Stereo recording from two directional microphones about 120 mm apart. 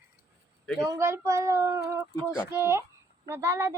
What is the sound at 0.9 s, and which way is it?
Speech, 25° right (ahead or behind).